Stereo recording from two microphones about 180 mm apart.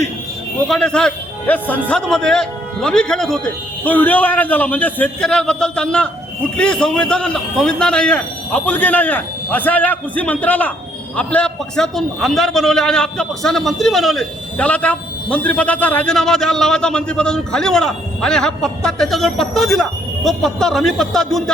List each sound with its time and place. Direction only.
0.7 s a man's voice: 5° left (ahead or behind)